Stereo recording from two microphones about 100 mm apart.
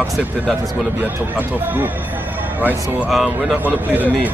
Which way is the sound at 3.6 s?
15° right (ahead or behind).